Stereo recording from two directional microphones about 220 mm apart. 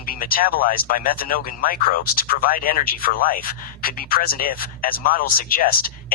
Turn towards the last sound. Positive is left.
turn(degrees=40)  # may be behind; listen again after turning